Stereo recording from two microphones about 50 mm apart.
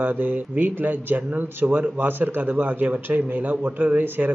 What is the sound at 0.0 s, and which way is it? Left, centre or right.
A man's voice, right.